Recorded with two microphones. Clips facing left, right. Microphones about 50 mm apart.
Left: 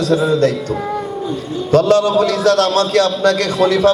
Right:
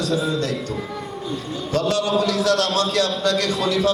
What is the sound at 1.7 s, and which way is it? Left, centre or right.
A man's voice, left.